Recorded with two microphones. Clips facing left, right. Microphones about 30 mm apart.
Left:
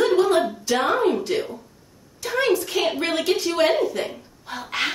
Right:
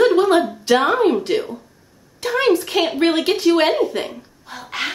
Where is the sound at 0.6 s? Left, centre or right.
Right.